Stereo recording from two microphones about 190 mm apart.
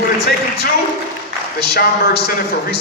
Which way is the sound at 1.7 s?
55° left (ahead or behind).